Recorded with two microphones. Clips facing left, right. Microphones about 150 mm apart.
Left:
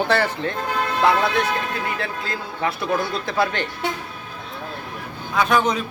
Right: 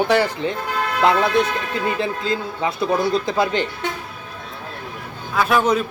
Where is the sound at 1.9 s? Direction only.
20° right (ahead or behind).